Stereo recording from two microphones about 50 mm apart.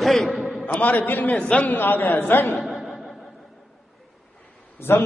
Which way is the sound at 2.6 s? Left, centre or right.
Centre.